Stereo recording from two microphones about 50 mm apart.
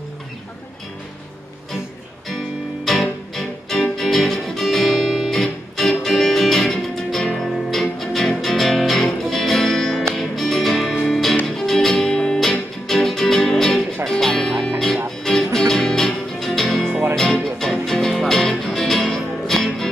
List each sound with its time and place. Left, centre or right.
2.2 s music: centre
3.9 s guitar: centre
7.3 s music: centre
12.1 s music: centre
12.8 s music: centre